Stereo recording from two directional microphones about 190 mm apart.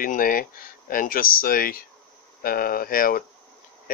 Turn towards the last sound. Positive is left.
turn(degrees=50)  # may be behind; listen again after turning